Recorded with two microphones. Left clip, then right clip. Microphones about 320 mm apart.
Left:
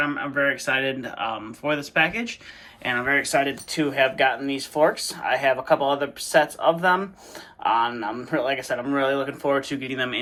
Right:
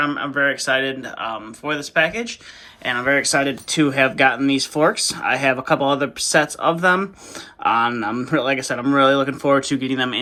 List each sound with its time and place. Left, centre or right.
0.0 s speech: centre